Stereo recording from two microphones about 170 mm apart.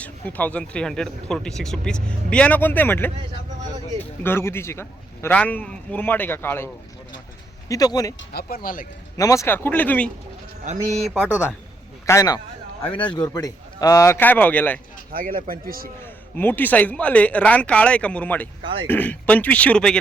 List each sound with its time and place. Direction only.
0.0 s speech: 10° left (ahead or behind)
4.2 s speech: 15° left (ahead or behind)
7.7 s speech: 20° left (ahead or behind)
8.3 s speech: 65° left (ahead or behind)
9.1 s speech: 20° left (ahead or behind)
10.7 s a man's voice: 45° right (ahead or behind)
11.2 s speech: 10° right (ahead or behind)
12.0 s speech: 20° left (ahead or behind)
15.1 s speech: 55° right (ahead or behind)
16.0 s speech: 10° left (ahead or behind)
18.6 s speech: 30° right (ahead or behind)
18.9 s speech: 10° left (ahead or behind)